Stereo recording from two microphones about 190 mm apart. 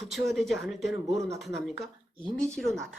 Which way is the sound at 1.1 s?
15° right (ahead or behind).